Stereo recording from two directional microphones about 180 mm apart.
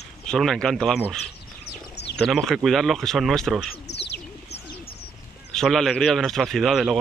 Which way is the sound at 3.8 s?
70° left (ahead or behind).